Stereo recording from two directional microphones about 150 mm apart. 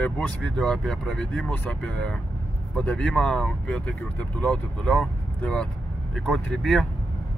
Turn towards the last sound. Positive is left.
turn(degrees=0)  # may be behind; listen again after turning